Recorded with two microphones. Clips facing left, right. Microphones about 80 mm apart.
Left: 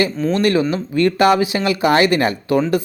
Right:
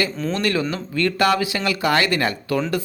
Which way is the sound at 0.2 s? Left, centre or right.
Centre.